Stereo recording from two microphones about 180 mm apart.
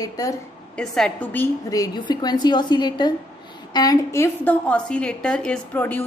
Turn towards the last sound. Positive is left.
turn(degrees=10)  # may be behind; listen again after turning